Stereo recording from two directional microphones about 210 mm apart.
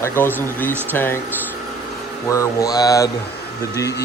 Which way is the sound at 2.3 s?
15° left (ahead or behind).